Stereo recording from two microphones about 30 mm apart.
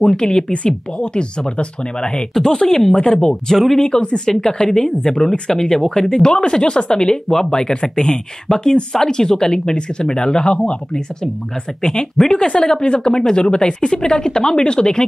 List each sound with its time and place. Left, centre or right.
0.1 s speech: left
3.5 s speech: centre
4.3 s speech: left
11.8 s speech: left